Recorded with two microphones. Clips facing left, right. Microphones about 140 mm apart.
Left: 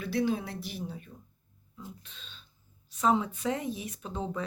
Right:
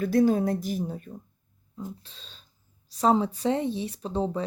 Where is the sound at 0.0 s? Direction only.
45° right (ahead or behind).